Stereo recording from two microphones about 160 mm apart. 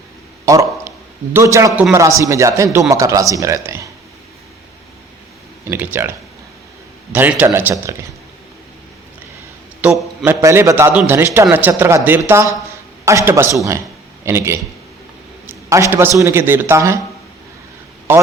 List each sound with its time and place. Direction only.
0.4 s a man's voice: 20° right (ahead or behind)
5.6 s a man's voice: 10° right (ahead or behind)
7.1 s a man's voice: 10° right (ahead or behind)
9.8 s a man's voice: 10° right (ahead or behind)